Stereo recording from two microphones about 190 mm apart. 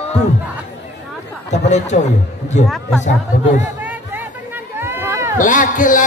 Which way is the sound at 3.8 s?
10° right (ahead or behind).